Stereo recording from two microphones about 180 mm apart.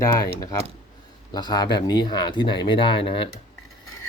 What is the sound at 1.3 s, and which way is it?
Speech, 25° left (ahead or behind).